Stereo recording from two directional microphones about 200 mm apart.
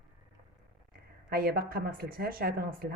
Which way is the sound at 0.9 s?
50° right (ahead or behind).